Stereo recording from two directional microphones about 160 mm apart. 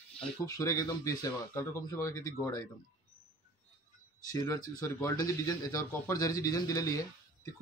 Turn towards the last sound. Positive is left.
turn(degrees=20)  # may be behind; listen again after turning